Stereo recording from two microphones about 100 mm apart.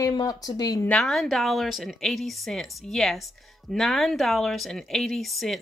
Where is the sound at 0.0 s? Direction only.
40° left (ahead or behind).